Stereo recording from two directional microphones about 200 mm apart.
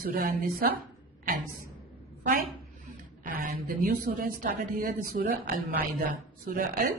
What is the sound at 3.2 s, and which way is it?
Speech, 45° right (ahead or behind).